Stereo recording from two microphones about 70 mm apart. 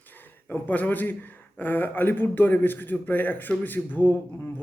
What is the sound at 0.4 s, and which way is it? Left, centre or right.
A man's voice, left.